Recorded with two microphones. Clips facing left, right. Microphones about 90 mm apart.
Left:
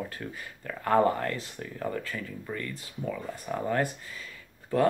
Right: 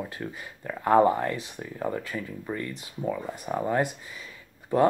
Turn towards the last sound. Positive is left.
turn(degrees=-20)  # may be behind; listen again after turning